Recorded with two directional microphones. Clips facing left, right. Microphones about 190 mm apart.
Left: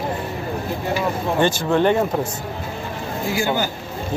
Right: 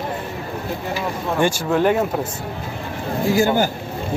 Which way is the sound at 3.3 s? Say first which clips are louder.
Right 4 dB; 45° right (ahead or behind).